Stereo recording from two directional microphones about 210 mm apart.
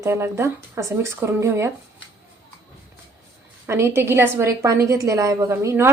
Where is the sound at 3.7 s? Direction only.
10° right (ahead or behind).